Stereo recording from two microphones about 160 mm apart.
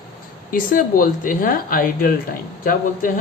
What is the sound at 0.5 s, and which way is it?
Speech, 55° left (ahead or behind).